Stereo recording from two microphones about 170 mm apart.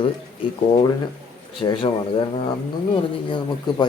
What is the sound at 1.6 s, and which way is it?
Speech, 30° left (ahead or behind).